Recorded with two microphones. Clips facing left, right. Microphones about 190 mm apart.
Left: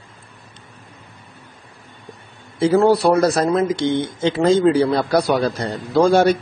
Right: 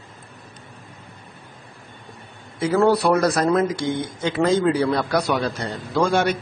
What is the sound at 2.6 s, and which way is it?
Speech, 25° left (ahead or behind).